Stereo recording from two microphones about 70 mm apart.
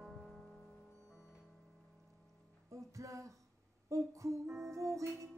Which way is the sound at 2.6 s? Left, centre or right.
Right.